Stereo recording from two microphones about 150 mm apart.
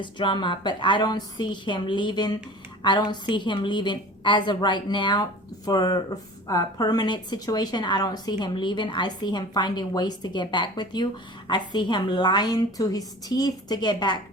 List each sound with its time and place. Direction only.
0.0 s a woman's voice: 30° left (ahead or behind)